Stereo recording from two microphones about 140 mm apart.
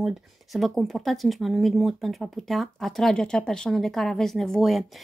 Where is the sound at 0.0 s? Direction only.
Centre (ahead or behind).